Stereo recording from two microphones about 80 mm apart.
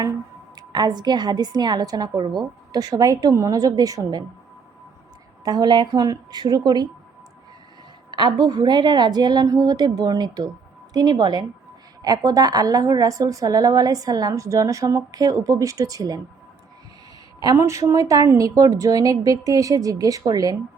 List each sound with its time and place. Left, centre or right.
0.5 s a woman's voice: right
5.5 s a woman's voice: right
8.4 s a woman's voice: right
17.4 s a woman's voice: right